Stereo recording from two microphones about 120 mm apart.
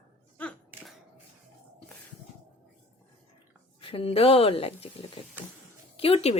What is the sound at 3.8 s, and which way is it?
Speech, 50° left (ahead or behind).